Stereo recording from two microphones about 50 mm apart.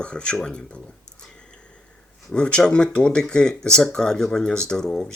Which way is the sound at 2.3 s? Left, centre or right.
Centre.